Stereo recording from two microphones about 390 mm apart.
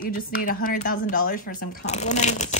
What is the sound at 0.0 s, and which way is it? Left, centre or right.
A woman's voice, left.